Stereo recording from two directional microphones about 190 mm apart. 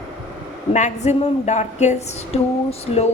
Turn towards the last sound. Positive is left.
turn(degrees=35)  # may be behind; listen again after turning